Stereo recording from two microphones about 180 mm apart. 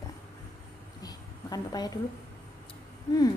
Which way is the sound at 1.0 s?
20° left (ahead or behind).